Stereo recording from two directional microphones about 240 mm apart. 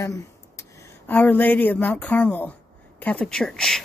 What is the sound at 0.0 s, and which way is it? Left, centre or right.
Speech, centre.